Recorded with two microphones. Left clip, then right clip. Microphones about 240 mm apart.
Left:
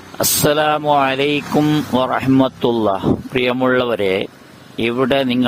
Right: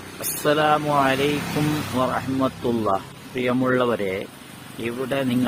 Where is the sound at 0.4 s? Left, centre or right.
Left.